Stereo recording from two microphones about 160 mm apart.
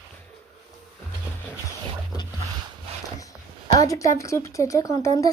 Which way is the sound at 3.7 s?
20° left (ahead or behind).